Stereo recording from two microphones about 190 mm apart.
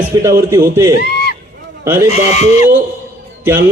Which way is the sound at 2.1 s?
35° left (ahead or behind).